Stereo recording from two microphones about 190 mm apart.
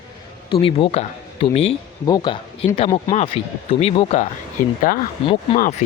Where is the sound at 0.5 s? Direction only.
30° left (ahead or behind).